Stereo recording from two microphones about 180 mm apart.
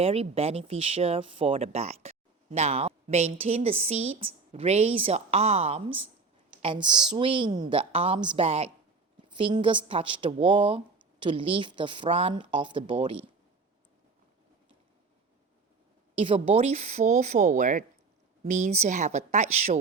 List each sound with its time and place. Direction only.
0.0 s a woman's voice: 35° right (ahead or behind)
16.2 s speech: 30° right (ahead or behind)